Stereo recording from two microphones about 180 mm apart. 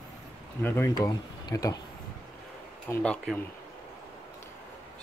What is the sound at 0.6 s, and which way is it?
Speech, 10° left (ahead or behind).